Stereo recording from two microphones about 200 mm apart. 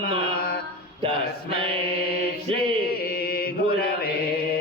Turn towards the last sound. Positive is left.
turn(degrees=50)  # may be behind; listen again after turning